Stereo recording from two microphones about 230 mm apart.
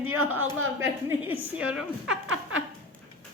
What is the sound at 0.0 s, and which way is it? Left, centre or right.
Speech, right.